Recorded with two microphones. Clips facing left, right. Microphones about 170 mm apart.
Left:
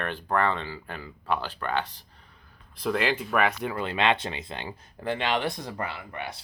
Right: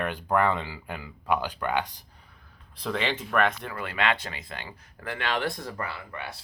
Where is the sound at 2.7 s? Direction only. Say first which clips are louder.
Left 3 dB; 5° left (ahead or behind); by 6.4 s 20° left (ahead or behind).